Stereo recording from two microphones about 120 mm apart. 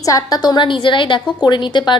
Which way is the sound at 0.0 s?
30° left (ahead or behind).